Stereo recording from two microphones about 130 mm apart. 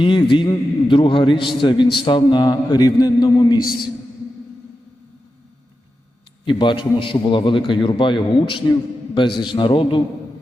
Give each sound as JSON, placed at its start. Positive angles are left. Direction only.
{"t": 0.0, "sound": "a man's voice", "side_deg": 40}
{"t": 6.4, "sound": "a man's voice", "side_deg": 40}